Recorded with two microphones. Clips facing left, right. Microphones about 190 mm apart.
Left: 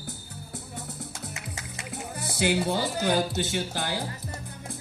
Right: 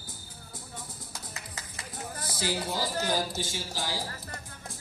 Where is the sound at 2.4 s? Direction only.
60° left (ahead or behind).